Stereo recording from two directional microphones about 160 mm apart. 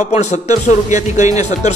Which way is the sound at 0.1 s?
45° left (ahead or behind).